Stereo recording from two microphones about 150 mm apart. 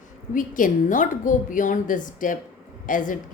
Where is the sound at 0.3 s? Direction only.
60° left (ahead or behind).